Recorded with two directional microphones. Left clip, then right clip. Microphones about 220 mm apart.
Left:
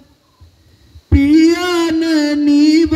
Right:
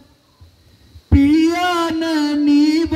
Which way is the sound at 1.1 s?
30° left (ahead or behind).